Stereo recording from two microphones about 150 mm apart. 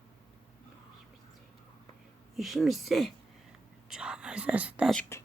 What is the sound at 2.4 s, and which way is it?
Speech, centre (ahead or behind).